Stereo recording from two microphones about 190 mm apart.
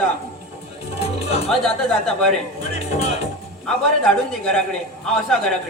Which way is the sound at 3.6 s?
5° left (ahead or behind).